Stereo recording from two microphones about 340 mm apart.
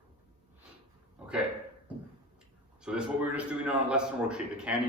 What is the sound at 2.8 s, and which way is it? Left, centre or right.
A man's voice, centre.